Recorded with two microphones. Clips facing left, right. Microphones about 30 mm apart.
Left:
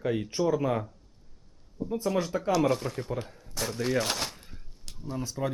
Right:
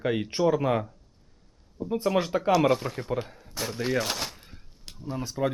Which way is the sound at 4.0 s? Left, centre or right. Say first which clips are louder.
Even; centre.